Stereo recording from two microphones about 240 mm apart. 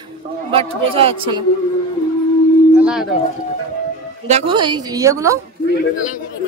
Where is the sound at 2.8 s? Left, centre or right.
Centre.